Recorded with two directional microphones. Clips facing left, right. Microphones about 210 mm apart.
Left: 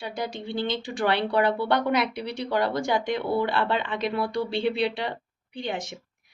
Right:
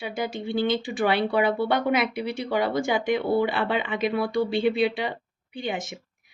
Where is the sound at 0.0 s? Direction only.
5° right (ahead or behind).